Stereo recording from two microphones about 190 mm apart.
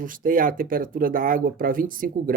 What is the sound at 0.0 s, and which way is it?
Speech, 45° right (ahead or behind).